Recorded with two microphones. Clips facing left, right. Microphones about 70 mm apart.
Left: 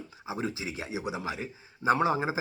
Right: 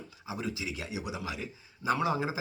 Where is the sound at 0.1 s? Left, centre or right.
Left.